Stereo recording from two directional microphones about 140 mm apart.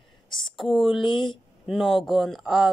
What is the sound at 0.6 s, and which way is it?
Speech, centre (ahead or behind).